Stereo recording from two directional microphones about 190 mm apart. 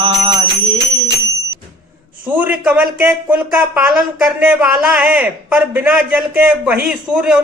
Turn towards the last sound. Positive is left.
turn(degrees=-5)  # may be behind; listen again after turning